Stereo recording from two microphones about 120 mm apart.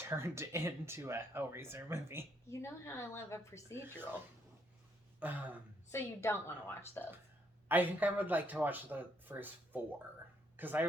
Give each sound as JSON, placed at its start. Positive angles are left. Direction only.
{"t": 0.0, "sound": "speech", "side_deg": -20}
{"t": 2.5, "sound": "a woman's voice", "side_deg": 25}
{"t": 5.2, "sound": "speech", "side_deg": -15}
{"t": 5.9, "sound": "a woman's voice", "side_deg": 25}
{"t": 7.7, "sound": "speech", "side_deg": -15}